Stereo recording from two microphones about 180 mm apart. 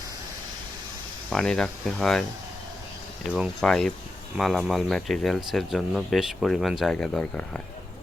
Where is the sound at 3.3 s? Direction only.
Centre (ahead or behind).